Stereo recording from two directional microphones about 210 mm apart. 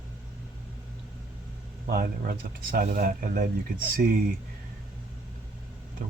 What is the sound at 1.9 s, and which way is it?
Speech, 45° right (ahead or behind).